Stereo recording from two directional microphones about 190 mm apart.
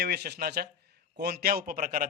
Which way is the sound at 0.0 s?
55° right (ahead or behind).